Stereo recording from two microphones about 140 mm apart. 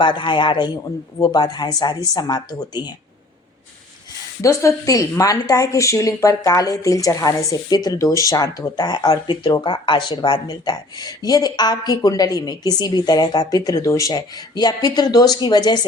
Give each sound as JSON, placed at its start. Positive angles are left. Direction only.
{"t": 0.0, "sound": "a man's voice", "side_deg": 35}
{"t": 4.4, "sound": "a woman's voice", "side_deg": 20}